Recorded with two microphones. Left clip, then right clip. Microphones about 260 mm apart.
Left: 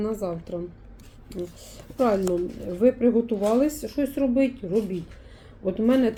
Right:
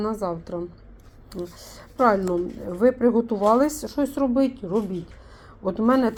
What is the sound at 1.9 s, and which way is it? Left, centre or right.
A woman's voice, right.